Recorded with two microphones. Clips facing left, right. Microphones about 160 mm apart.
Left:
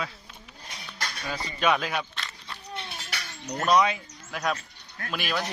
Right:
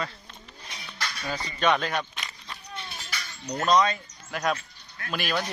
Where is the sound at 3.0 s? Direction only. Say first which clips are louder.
Even; 70° left (ahead or behind).